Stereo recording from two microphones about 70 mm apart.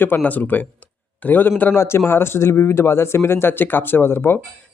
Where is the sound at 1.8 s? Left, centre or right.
Left.